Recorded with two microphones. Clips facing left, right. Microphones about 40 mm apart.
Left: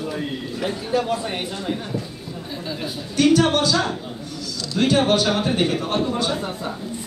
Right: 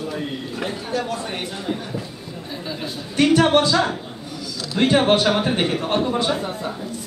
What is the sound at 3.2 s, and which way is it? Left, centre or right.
Speech, centre.